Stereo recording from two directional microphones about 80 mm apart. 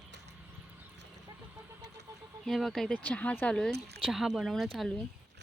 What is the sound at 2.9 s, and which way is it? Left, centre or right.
A woman's voice, centre.